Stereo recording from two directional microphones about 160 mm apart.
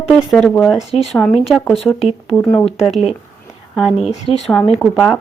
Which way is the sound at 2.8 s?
Centre (ahead or behind).